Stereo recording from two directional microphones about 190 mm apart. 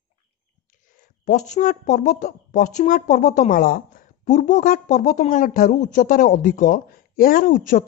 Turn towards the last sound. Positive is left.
turn(degrees=45)  # may be behind; listen again after turning